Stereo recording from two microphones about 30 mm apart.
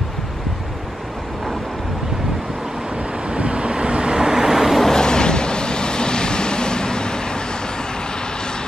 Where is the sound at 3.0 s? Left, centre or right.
Right; by 4.7 s centre.